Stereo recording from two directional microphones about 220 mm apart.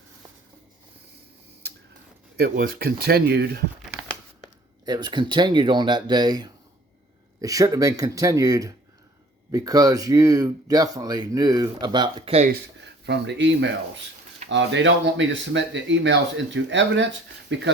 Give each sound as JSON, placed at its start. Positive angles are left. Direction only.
{"t": 2.4, "sound": "speech", "side_deg": -40}
{"t": 4.9, "sound": "speech", "side_deg": -20}
{"t": 12.8, "sound": "speech", "side_deg": -50}